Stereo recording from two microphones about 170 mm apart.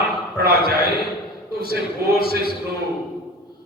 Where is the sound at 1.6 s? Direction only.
65° right (ahead or behind).